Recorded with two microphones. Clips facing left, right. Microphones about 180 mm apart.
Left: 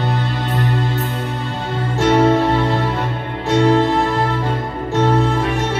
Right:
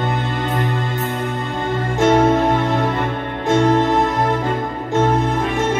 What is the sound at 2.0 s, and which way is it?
Music, 50° right (ahead or behind).